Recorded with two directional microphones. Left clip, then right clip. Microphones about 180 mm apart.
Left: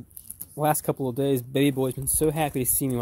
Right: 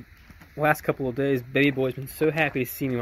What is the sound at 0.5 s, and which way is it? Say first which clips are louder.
Speech: right 2 dB; 20° left (ahead or behind).